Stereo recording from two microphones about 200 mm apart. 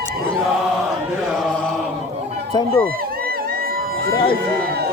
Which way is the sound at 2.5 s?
20° left (ahead or behind).